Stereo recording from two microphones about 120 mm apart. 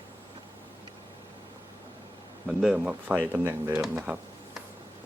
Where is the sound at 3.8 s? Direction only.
5° right (ahead or behind).